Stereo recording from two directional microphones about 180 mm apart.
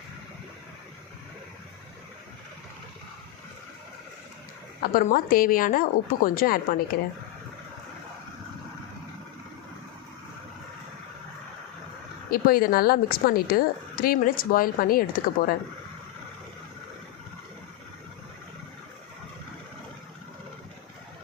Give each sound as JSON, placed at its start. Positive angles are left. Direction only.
{"t": 4.8, "sound": "a woman's voice", "side_deg": 50}
{"t": 12.3, "sound": "a woman's voice", "side_deg": 55}